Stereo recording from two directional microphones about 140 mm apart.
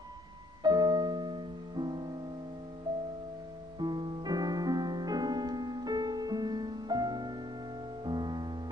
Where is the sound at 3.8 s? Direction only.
30° right (ahead or behind).